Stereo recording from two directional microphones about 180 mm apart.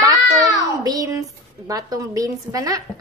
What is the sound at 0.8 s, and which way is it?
A woman's voice, 20° right (ahead or behind).